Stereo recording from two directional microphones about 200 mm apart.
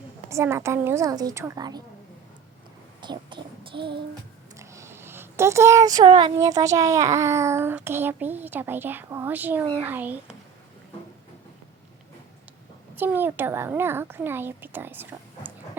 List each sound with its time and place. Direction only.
0.3 s a child's voice: 15° right (ahead or behind)
3.0 s child singing: 25° right (ahead or behind)
4.5 s a child's voice: 15° right (ahead or behind)
13.0 s a child's voice: 10° right (ahead or behind)